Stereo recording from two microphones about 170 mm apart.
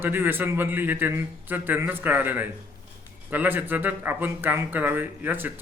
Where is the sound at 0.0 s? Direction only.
15° right (ahead or behind).